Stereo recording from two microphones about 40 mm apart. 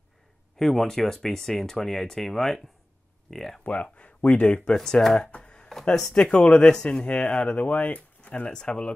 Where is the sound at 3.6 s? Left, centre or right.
Left.